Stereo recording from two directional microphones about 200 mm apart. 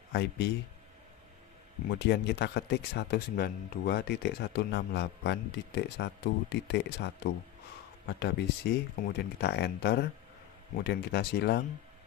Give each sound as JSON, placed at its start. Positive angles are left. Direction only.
{"t": 0.1, "sound": "speech", "side_deg": 55}
{"t": 1.9, "sound": "speech", "side_deg": 55}
{"t": 8.1, "sound": "speech", "side_deg": 55}